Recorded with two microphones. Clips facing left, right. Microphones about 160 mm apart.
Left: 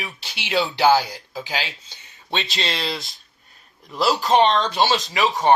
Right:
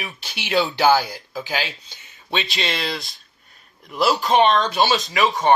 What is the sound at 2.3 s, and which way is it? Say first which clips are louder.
Speech: right 1 dB; 35° left (ahead or behind).